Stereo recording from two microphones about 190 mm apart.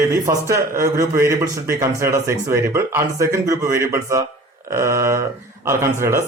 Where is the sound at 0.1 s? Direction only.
15° right (ahead or behind).